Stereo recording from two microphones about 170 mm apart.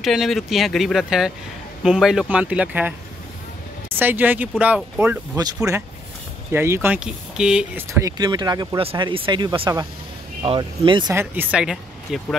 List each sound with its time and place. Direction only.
0.0 s speech: centre (ahead or behind)
4.0 s speech: 10° right (ahead or behind)
7.9 s speech: 20° right (ahead or behind)
11.1 s speech: 10° right (ahead or behind)